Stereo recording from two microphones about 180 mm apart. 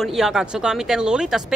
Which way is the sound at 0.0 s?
Centre (ahead or behind).